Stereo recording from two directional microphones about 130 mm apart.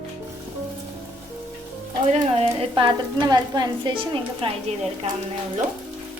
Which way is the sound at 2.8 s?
35° right (ahead or behind).